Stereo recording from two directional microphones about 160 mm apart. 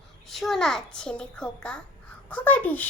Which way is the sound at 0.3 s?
Centre (ahead or behind).